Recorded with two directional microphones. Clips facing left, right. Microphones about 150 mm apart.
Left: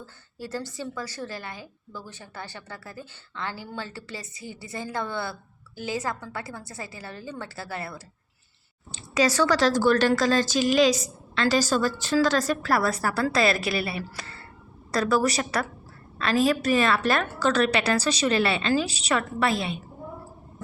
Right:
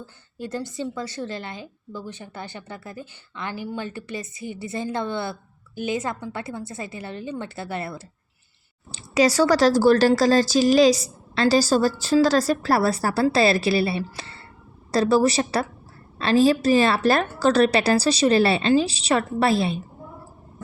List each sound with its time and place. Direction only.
0.0 s a woman's voice: 20° right (ahead or behind)
8.9 s a woman's voice: 35° right (ahead or behind)